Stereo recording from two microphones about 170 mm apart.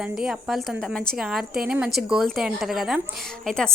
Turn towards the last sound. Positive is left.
turn(degrees=5)  # may be behind; listen again after turning